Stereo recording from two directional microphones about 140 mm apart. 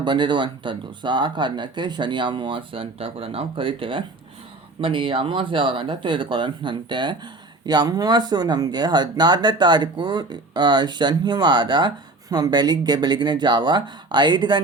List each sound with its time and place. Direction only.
0.0 s speech: 35° right (ahead or behind)